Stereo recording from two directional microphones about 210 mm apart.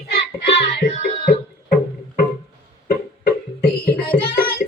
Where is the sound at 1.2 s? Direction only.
45° left (ahead or behind).